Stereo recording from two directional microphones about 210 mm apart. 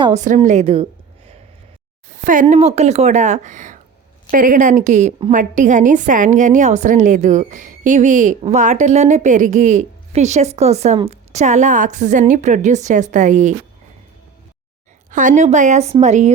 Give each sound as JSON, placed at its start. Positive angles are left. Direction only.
{"t": 0.2, "sound": "a woman's voice", "side_deg": -35}
{"t": 2.0, "sound": "a woman's voice", "side_deg": -40}
{"t": 15.1, "sound": "a woman's voice", "side_deg": -40}